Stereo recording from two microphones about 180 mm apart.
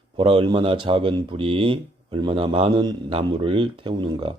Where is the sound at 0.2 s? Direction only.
25° right (ahead or behind).